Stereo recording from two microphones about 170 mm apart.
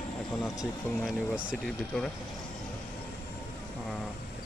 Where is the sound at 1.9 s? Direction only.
5° left (ahead or behind).